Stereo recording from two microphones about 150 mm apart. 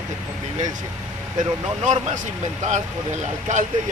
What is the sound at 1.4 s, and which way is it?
Speech, 55° right (ahead or behind).